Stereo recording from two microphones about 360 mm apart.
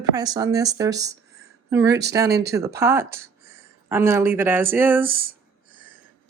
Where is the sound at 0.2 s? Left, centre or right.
Centre.